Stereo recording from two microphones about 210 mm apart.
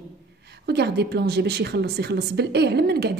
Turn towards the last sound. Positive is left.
turn(degrees=-50)  # may be behind; listen again after turning